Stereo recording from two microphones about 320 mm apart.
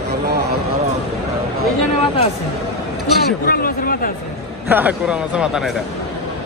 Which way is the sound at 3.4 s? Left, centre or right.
Left.